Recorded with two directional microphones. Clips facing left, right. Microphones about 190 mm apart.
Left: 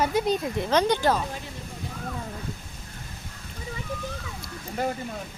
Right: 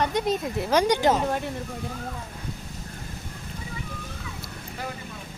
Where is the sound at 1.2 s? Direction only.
60° right (ahead or behind).